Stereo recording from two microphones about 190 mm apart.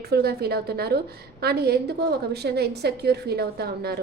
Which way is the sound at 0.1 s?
55° right (ahead or behind).